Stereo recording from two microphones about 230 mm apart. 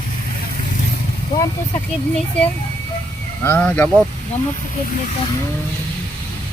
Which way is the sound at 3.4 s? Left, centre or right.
Centre.